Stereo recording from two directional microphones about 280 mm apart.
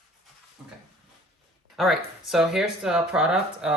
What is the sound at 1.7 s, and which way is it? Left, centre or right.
Speech, centre.